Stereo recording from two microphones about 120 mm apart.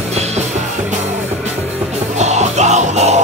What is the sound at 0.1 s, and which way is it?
Music, 65° right (ahead or behind).